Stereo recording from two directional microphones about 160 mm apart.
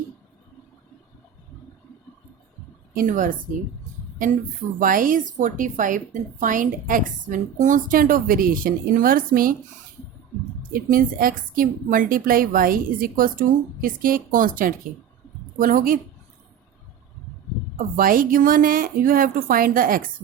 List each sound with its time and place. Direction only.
2.9 s a woman's voice: 60° right (ahead or behind)
10.6 s a woman's voice: 60° right (ahead or behind)
17.7 s a woman's voice: 60° right (ahead or behind)